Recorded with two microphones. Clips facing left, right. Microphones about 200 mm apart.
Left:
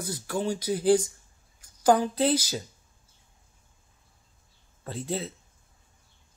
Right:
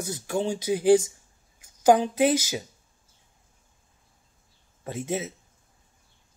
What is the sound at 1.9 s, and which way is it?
Speech, 15° right (ahead or behind).